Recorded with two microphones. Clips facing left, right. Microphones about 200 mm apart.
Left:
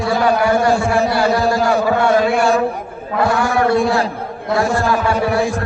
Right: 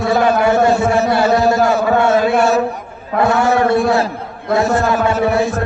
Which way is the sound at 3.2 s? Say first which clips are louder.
Right 2 dB; 20° right (ahead or behind).